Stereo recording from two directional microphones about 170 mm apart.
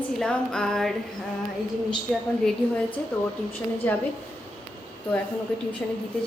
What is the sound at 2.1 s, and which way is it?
Speech, 5° left (ahead or behind).